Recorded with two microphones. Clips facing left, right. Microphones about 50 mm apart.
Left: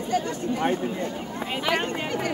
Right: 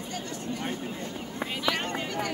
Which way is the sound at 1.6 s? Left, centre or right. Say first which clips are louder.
Left 4 dB; left.